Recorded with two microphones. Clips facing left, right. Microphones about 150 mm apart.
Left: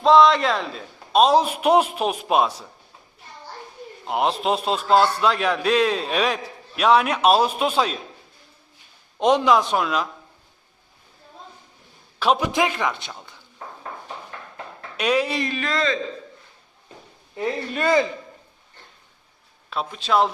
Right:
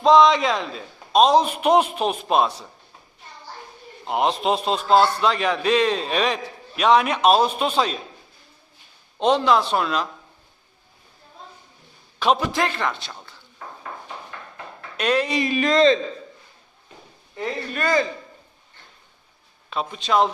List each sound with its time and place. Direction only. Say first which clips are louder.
0.0 s a man's voice: even; centre (ahead or behind)
4.0 s a man's voice: right 1 dB; centre (ahead or behind)
9.1 s a man's voice: left 1 dB; 10° left (ahead or behind)
12.2 s a man's voice: left 1 dB; 5° left (ahead or behind)
14.9 s a man's voice: even; 10° left (ahead or behind)
15.4 s a man's voice: right 7 dB; 15° right (ahead or behind)
17.7 s a man's voice: left 2 dB; 20° left (ahead or behind)
19.7 s a man's voice: even; centre (ahead or behind)